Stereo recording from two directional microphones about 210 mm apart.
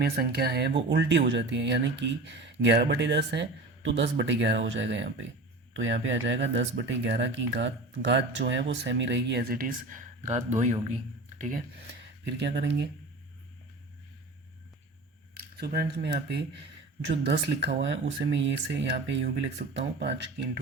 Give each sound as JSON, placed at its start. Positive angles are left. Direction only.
{"t": 0.0, "sound": "speech", "side_deg": -50}
{"t": 12.4, "sound": "speech", "side_deg": -55}
{"t": 15.4, "sound": "speech", "side_deg": -45}